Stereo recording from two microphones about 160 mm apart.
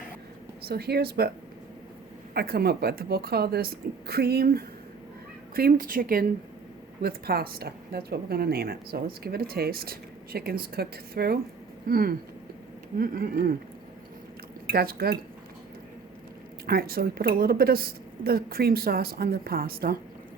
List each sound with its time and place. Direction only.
0.6 s speech: 80° right
2.3 s a woman's voice: 80° right
14.7 s a woman's voice: 70° right (ahead or behind)
16.6 s a woman's voice: 70° right (ahead or behind)